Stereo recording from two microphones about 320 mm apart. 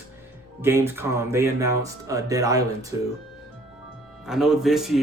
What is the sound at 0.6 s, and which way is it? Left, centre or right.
Speech, centre.